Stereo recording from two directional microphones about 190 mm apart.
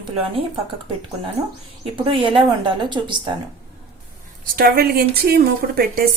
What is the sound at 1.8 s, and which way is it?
Speech, 25° right (ahead or behind).